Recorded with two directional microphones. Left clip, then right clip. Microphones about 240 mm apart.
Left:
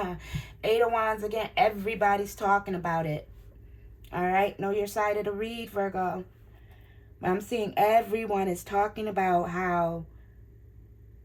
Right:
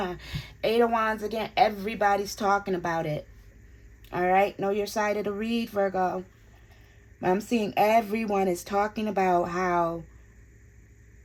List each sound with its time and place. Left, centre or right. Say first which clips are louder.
0.2 s a woman's voice: right 4 dB; right
7.2 s speech: right 3 dB; right